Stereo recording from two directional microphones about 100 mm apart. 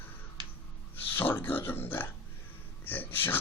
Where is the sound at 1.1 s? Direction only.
20° left (ahead or behind).